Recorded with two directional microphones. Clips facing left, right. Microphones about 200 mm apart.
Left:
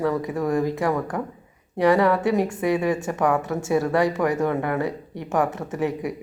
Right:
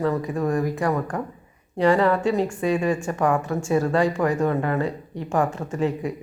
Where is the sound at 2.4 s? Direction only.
20° left (ahead or behind).